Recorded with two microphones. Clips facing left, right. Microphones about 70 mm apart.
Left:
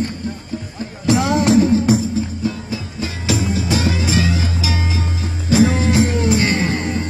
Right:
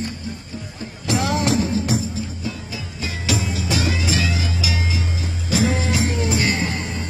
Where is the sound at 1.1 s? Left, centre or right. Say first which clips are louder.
Left 6 dB; left.